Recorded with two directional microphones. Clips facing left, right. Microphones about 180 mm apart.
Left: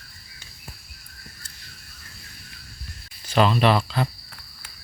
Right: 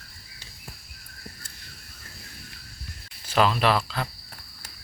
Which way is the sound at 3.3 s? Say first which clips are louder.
Left 3 dB; centre (ahead or behind).